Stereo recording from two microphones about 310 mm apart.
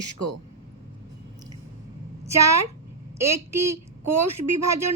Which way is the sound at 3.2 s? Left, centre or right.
Right.